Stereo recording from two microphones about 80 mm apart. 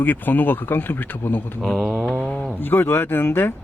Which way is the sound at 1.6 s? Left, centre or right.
Centre.